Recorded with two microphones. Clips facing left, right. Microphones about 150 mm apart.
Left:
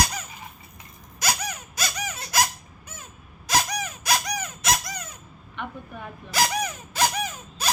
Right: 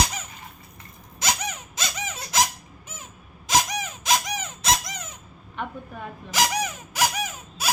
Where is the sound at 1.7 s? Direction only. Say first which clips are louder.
Left 1 dB; 25° right (ahead or behind).